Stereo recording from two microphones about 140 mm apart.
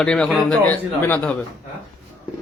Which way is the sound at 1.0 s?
15° left (ahead or behind).